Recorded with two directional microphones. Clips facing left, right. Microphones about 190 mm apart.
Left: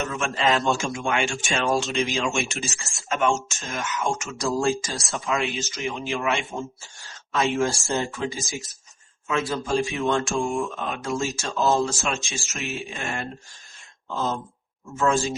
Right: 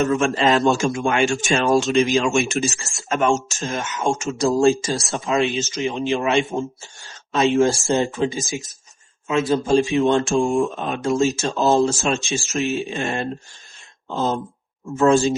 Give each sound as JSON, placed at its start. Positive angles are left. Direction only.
{"t": 0.1, "sound": "a man's voice", "side_deg": -40}